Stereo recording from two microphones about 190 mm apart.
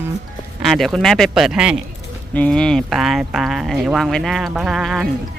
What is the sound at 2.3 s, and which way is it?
Speech, 5° left (ahead or behind).